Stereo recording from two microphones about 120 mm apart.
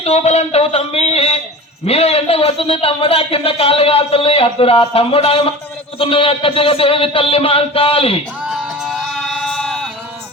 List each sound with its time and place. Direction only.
0.0 s a man's voice: 60° left (ahead or behind)
8.4 s music: centre (ahead or behind)